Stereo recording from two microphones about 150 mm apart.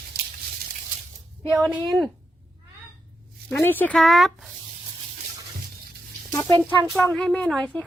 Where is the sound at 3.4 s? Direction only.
10° left (ahead or behind).